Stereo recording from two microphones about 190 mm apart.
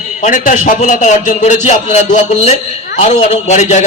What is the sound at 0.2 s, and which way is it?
A man's voice, 40° left (ahead or behind).